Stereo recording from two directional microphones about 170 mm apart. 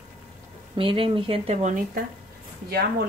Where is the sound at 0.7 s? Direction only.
30° right (ahead or behind).